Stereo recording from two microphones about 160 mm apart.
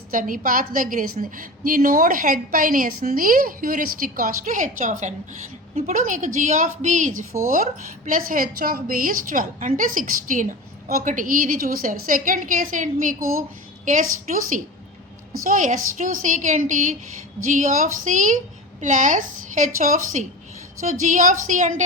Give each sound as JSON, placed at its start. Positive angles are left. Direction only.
{"t": 0.1, "sound": "a woman's voice", "side_deg": -60}